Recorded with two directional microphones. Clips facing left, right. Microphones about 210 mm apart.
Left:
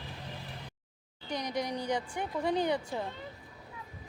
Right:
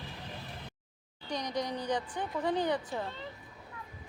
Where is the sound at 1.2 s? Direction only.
10° left (ahead or behind).